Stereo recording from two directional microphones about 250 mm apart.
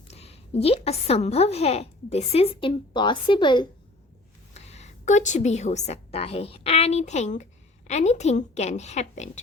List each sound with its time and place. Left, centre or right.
0.1 s a woman's voice: left